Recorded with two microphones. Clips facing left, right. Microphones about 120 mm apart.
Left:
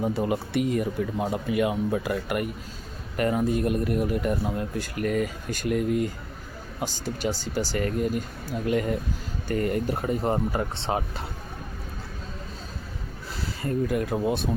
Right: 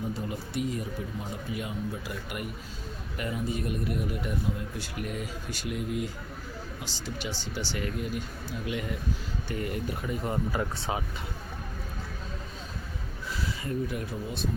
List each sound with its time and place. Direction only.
0.0 s speech: 85° left; by 10.6 s 45° left (ahead or behind)
10.6 s speech: 25° left (ahead or behind)
13.6 s speech: 45° left (ahead or behind)